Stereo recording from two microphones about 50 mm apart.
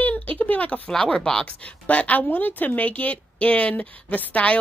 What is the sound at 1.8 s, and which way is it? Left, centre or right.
A woman's voice, left.